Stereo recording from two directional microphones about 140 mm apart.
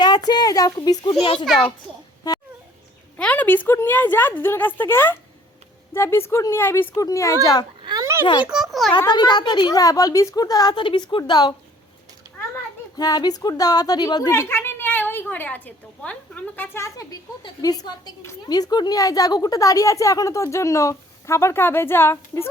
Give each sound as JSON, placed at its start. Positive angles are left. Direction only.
{"t": 0.0, "sound": "a woman's voice", "side_deg": 30}
{"t": 3.2, "sound": "a woman's voice", "side_deg": 10}
{"t": 7.9, "sound": "a sound", "side_deg": -25}
{"t": 8.2, "sound": "a woman's voice", "side_deg": 35}
{"t": 8.4, "sound": "a child's voice", "side_deg": 0}
{"t": 9.0, "sound": "a woman's voice", "side_deg": 30}
{"t": 13.0, "sound": "a woman's voice", "side_deg": 30}